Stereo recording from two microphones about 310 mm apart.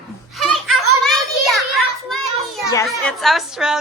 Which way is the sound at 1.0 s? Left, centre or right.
Centre.